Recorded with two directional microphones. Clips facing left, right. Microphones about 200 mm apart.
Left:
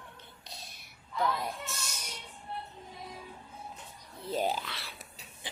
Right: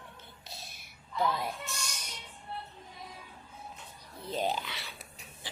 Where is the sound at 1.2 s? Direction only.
5° right (ahead or behind).